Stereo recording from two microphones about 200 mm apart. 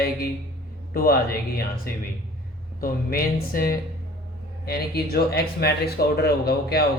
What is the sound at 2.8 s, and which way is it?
Speech, 45° left (ahead or behind).